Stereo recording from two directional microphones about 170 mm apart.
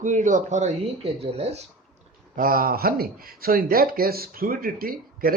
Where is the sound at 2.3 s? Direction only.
55° right (ahead or behind).